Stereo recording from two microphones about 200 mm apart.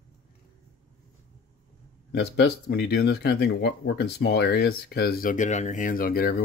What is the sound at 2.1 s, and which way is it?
Speech, 55° left (ahead or behind).